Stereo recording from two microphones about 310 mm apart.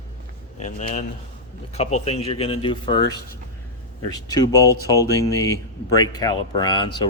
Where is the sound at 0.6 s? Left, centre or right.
Left.